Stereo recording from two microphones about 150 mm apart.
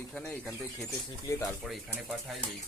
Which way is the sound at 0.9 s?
20° left (ahead or behind).